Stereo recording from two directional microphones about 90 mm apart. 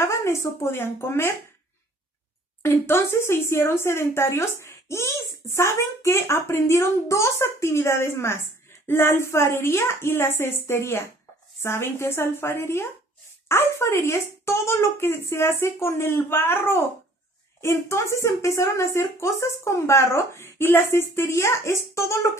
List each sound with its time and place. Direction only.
0.0 s speech: 30° left (ahead or behind)
2.6 s a woman's voice: 30° left (ahead or behind)